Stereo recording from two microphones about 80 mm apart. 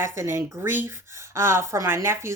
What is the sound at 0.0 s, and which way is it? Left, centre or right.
Speech, right.